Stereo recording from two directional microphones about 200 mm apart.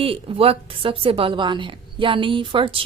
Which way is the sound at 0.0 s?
30° right (ahead or behind).